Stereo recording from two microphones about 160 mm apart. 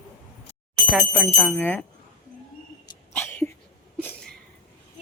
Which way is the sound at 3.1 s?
10° left (ahead or behind).